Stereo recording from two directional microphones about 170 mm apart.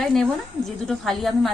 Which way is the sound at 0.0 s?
Centre (ahead or behind).